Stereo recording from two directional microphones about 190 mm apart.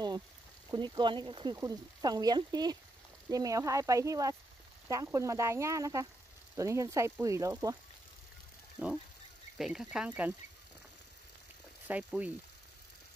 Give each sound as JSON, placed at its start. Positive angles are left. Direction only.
{"t": 0.7, "sound": "speech", "side_deg": -25}
{"t": 8.7, "sound": "speech", "side_deg": -5}
{"t": 11.9, "sound": "speech", "side_deg": -5}